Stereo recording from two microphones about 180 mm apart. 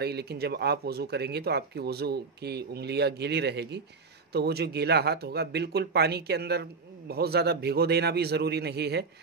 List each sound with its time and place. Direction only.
0.0 s speech: 65° right (ahead or behind)